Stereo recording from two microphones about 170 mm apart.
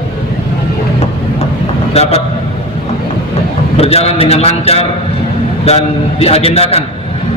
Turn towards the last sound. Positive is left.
turn(degrees=35)  # may be behind; listen again after turning